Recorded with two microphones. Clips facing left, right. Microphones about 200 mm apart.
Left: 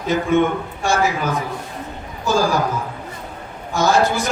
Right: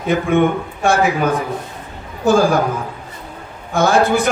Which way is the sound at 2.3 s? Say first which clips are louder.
Right 5 dB; 55° right (ahead or behind).